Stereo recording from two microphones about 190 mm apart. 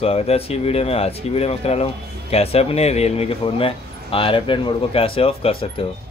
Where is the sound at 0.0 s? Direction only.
30° left (ahead or behind).